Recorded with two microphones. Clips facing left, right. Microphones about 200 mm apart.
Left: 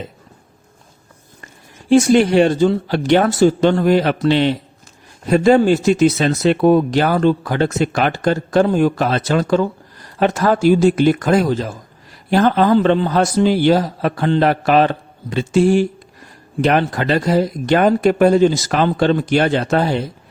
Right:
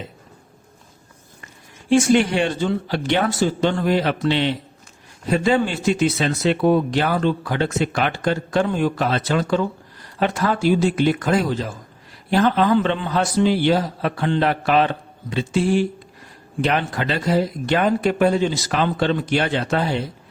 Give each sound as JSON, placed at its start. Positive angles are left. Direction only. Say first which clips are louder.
{"t": 1.9, "sound": "speech", "louder": "left 4 dB", "side_deg": 40}